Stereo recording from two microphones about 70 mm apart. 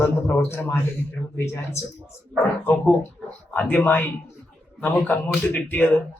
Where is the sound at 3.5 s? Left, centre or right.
Left.